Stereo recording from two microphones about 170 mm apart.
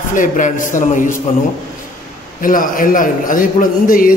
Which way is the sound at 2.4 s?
55° left (ahead or behind).